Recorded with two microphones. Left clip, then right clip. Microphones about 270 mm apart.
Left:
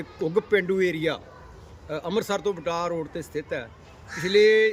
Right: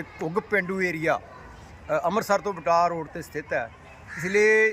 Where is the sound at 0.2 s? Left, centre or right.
Centre.